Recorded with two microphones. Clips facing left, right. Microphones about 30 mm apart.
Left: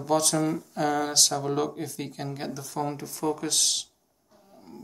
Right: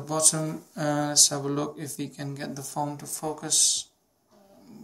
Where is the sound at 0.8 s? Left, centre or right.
Centre.